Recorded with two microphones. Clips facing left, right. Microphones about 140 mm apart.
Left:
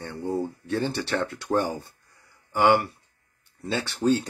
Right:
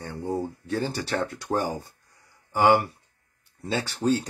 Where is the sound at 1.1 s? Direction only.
20° right (ahead or behind).